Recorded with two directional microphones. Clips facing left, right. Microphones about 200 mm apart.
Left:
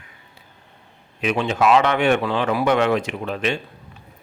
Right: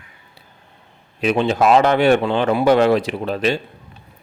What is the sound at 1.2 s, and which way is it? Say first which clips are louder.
Speech: right 4 dB; 35° right (ahead or behind).